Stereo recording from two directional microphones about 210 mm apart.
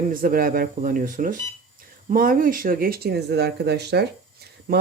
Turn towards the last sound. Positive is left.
turn(degrees=-45)  # may be behind; listen again after turning